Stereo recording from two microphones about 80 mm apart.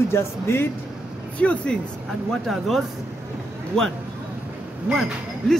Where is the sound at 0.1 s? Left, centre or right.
Left.